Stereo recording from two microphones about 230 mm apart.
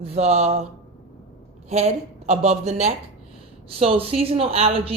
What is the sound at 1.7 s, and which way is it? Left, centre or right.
A woman's voice, right.